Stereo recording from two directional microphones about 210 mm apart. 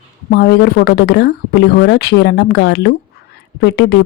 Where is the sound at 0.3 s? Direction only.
50° left (ahead or behind).